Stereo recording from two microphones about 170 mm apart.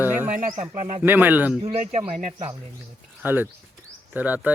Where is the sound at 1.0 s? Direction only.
10° right (ahead or behind).